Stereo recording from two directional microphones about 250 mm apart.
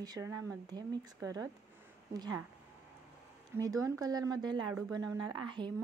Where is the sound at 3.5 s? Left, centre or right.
Centre.